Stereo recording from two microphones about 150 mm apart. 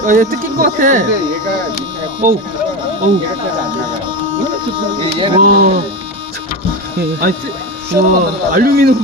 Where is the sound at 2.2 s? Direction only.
65° right (ahead or behind).